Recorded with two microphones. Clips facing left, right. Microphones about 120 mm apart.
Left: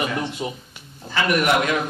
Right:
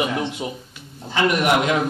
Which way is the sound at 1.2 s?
20° right (ahead or behind).